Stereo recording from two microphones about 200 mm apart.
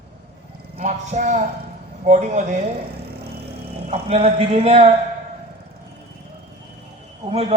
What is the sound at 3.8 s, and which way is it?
A woman's voice, 30° right (ahead or behind).